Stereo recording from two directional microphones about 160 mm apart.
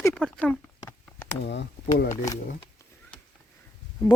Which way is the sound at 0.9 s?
15° left (ahead or behind).